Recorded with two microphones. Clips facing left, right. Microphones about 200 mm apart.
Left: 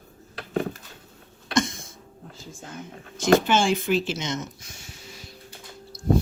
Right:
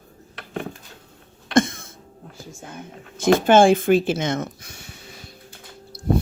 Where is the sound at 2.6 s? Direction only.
55° right (ahead or behind).